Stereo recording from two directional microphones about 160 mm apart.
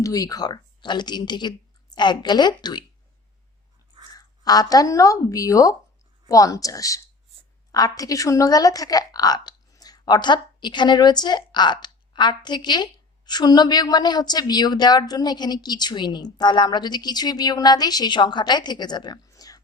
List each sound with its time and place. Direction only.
0.0 s a woman's voice: 20° left (ahead or behind)
4.1 s a woman's voice: 25° left (ahead or behind)